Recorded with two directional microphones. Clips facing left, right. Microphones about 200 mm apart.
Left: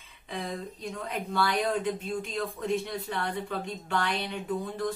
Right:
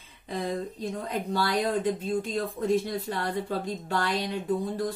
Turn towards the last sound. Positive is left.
turn(degrees=-35)  # may be behind; listen again after turning